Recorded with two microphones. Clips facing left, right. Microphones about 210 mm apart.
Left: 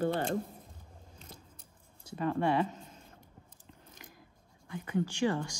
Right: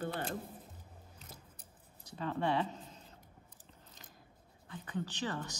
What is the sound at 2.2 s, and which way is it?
Speech, 50° left (ahead or behind).